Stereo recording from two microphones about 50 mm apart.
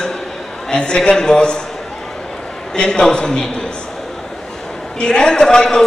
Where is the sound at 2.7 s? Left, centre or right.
Centre.